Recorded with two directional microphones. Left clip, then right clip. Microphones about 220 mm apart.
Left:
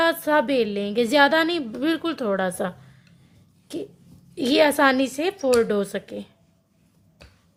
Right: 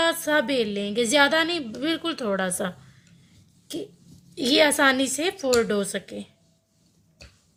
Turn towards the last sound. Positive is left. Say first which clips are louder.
# left 2 dB
turn(degrees=20)  # may be behind; listen again after turning